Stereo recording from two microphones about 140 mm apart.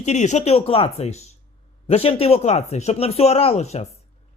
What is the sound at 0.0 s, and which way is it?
Speech, 55° left (ahead or behind).